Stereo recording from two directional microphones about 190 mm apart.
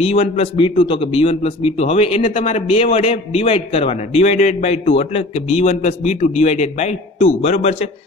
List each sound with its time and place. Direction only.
0.0 s a man's voice: 30° left (ahead or behind)